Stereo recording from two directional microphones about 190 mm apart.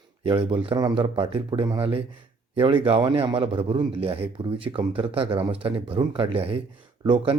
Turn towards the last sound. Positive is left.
turn(degrees=-25)  # may be behind; listen again after turning